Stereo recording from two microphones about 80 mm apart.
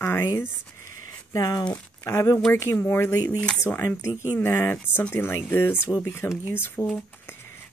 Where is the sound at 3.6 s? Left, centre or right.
Left.